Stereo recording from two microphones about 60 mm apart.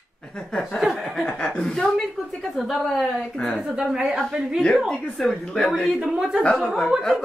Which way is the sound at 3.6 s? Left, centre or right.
Centre.